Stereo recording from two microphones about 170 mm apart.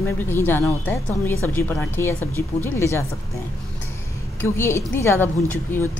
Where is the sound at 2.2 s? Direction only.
20° right (ahead or behind).